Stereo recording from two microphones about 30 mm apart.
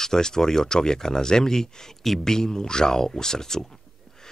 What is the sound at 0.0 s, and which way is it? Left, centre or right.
Speech, centre.